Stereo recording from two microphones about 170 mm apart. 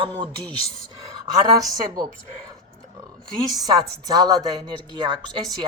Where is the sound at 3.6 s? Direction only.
20° right (ahead or behind).